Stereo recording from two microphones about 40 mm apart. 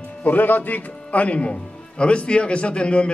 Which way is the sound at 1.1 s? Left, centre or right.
Left.